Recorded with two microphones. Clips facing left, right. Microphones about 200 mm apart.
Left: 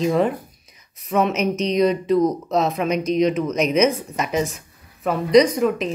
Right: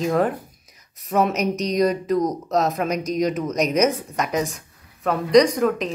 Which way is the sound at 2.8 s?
40° right (ahead or behind).